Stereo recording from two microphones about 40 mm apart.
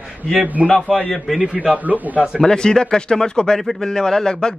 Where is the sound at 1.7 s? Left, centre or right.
Right.